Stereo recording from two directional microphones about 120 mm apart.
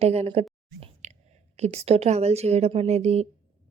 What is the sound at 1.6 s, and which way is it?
Speech, 60° right (ahead or behind).